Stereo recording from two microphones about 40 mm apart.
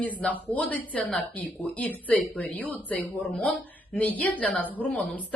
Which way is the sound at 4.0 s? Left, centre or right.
Left.